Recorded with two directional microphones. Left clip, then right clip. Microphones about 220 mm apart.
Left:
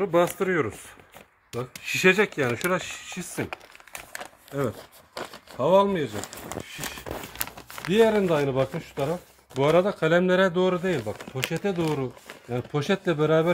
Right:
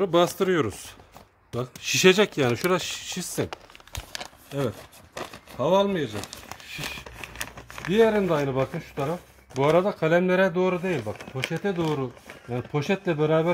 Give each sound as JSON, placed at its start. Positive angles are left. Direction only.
{"t": 0.0, "sound": "speech", "side_deg": -40}
{"t": 1.9, "sound": "speech", "side_deg": -50}
{"t": 5.1, "sound": "speech", "side_deg": -5}
{"t": 7.3, "sound": "crumpling", "side_deg": 15}
{"t": 7.9, "sound": "speech", "side_deg": -10}